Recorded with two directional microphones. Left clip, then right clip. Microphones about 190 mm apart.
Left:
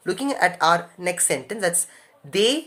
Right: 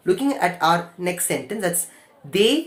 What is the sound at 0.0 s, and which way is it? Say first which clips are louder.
Speech: right 1 dB; 30° left (ahead or behind).